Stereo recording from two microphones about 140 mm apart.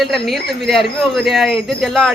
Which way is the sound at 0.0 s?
Centre (ahead or behind).